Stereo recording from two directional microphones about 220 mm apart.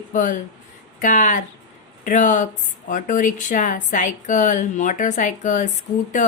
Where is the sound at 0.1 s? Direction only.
35° left (ahead or behind).